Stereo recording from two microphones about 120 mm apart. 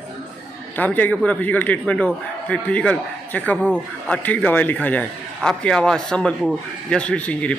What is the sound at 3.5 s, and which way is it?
Speech, 10° right (ahead or behind).